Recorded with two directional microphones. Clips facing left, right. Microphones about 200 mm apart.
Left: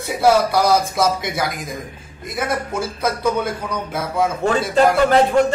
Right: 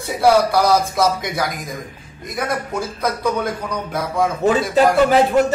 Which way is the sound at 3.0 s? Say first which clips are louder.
Left 1 dB; 5° left (ahead or behind).